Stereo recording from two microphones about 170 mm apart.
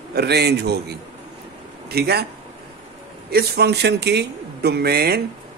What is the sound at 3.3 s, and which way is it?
Speech, 75° right (ahead or behind).